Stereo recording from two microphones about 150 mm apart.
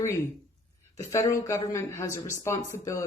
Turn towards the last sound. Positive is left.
turn(degrees=20)  # may be behind; listen again after turning